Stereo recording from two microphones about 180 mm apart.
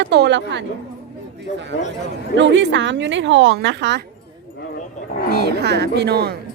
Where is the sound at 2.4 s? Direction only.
90° right.